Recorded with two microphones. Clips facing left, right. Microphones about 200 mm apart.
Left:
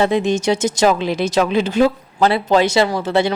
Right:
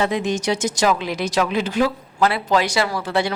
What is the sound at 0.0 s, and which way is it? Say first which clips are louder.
Speech: left 5 dB; 25° left (ahead or behind).